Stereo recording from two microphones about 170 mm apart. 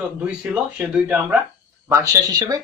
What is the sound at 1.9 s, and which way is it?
Speech, 15° right (ahead or behind).